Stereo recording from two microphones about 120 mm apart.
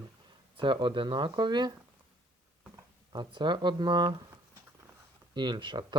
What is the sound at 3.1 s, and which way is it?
Speech, 40° right (ahead or behind).